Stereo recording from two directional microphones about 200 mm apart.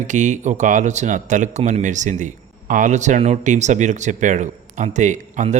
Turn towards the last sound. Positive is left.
turn(degrees=-35)  # may be behind; listen again after turning